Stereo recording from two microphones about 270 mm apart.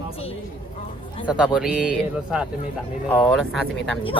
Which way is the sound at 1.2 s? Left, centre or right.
Centre.